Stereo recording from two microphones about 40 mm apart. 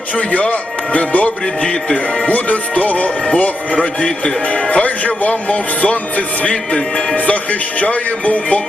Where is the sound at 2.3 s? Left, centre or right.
Left.